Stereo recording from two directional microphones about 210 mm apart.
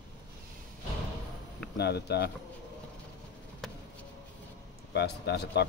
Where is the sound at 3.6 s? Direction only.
Centre (ahead or behind).